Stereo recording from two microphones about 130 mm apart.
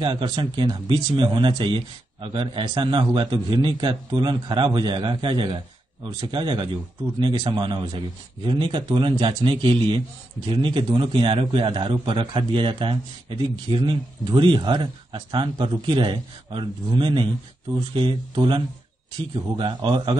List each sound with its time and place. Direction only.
0.0 s a man's voice: 35° right (ahead or behind)